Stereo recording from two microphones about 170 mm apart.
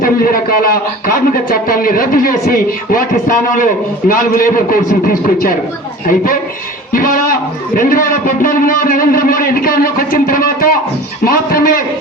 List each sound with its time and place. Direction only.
0.0 s speech: 60° left (ahead or behind)
6.9 s a man's voice: 55° left (ahead or behind)